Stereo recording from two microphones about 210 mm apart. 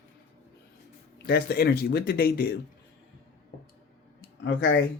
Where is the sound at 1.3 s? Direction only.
50° left (ahead or behind).